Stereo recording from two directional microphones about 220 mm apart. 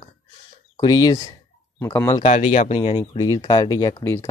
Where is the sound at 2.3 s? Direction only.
35° left (ahead or behind).